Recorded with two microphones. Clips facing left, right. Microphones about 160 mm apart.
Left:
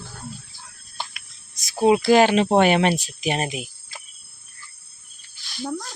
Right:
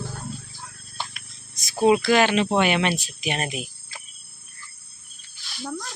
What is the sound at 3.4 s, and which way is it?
Speech, 20° left (ahead or behind).